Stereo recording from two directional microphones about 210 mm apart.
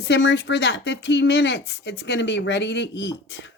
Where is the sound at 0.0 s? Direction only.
55° left (ahead or behind).